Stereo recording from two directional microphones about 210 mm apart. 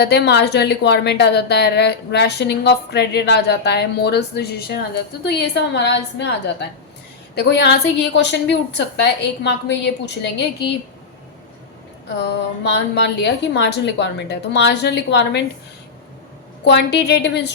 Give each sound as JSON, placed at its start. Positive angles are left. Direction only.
{"t": 0.0, "sound": "a woman's voice", "side_deg": 50}
{"t": 12.2, "sound": "a woman's voice", "side_deg": 55}
{"t": 16.6, "sound": "a woman's voice", "side_deg": 55}